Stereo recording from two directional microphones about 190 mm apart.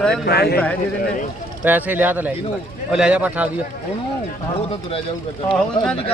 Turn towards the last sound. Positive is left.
turn(degrees=5)  # may be behind; listen again after turning